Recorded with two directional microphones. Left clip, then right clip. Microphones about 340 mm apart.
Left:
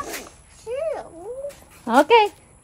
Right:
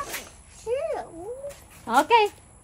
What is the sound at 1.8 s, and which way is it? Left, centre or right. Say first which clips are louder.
Speech: left 4 dB; left.